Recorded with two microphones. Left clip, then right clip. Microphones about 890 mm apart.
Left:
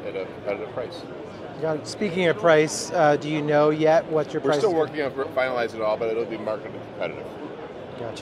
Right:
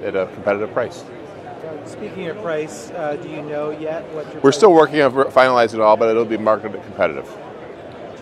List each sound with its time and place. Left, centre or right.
0.2 s speech: right
2.1 s speech: left
4.5 s speech: right